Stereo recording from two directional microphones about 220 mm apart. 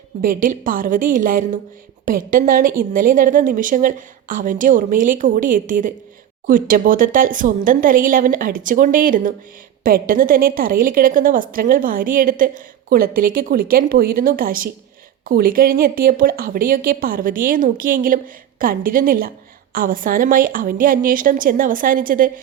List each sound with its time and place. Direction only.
0.2 s a woman's voice: 40° right (ahead or behind)